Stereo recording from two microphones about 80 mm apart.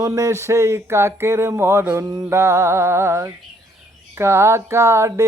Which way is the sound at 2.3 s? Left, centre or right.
Right.